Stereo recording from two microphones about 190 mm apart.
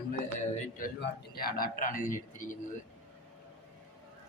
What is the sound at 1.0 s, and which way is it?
Speech, 50° left (ahead or behind).